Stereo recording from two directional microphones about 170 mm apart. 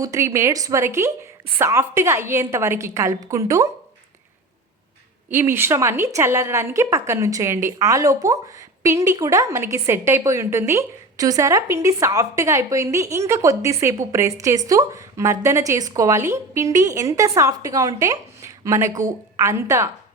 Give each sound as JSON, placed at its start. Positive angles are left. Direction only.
{"t": 0.0, "sound": "a woman's voice", "side_deg": -15}
{"t": 5.3, "sound": "a woman's voice", "side_deg": -15}